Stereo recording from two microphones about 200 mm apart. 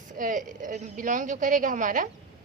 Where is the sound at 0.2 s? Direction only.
40° right (ahead or behind).